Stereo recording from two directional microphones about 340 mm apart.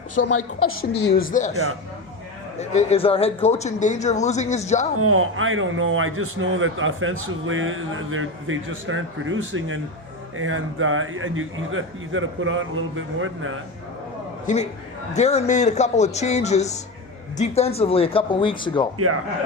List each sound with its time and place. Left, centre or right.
0.2 s a woman's voice: left
1.1 s a man's voice: left
2.6 s a man's voice: centre
4.9 s a man's voice: right
14.4 s a man's voice: centre